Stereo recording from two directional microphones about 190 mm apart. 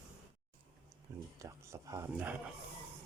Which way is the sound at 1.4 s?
15° right (ahead or behind).